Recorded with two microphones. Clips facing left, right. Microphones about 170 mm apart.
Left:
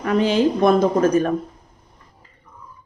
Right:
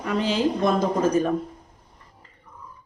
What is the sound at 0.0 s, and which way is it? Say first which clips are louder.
Speech: left 5 dB; 60° left (ahead or behind).